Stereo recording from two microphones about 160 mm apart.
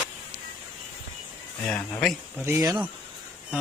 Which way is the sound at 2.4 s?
15° right (ahead or behind).